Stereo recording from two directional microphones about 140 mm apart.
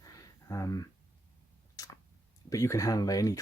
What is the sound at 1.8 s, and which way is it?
Tick-tock, 25° left (ahead or behind).